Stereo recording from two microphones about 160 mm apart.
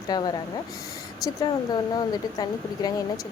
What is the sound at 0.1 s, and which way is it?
Speech, 25° left (ahead or behind).